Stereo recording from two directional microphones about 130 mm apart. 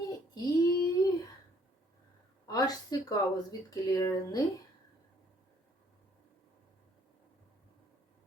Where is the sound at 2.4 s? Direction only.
25° left (ahead or behind).